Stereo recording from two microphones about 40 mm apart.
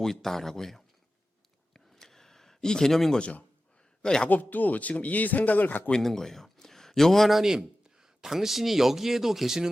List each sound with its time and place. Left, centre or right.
0.0 s speech: centre
2.0 s a sound: centre
4.0 s a man's voice: centre
4.3 s speech: left
6.0 s a man's voice: centre
7.3 s speech: centre